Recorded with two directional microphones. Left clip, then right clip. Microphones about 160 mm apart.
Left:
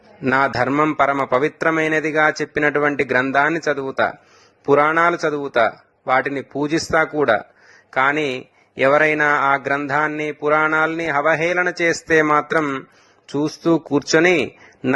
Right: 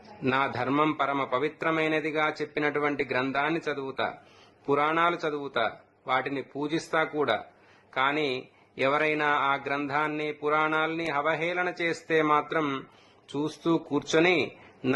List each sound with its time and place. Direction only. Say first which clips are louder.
0.3 s a man's voice: left 10 dB; 40° left (ahead or behind)
0.7 s a man's voice: left 9 dB; 25° left (ahead or behind)